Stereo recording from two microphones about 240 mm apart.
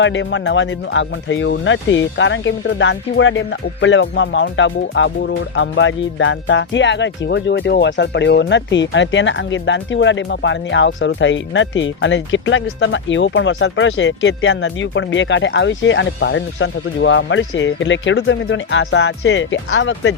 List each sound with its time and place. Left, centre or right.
0.0 s speech: left